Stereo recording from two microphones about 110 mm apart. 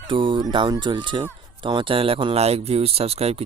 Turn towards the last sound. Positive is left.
turn(degrees=-65)  # may be behind; listen again after turning